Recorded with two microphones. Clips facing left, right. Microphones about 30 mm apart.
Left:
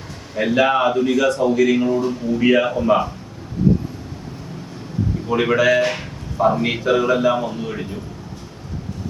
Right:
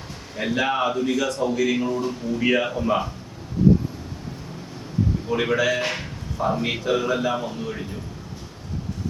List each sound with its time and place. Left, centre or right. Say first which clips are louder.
0.3 s a man's voice: left 6 dB; centre
5.4 s a man's voice: left 7 dB; centre
5.8 s speech: left 5 dB; centre
6.3 s a man's voice: left 6 dB; centre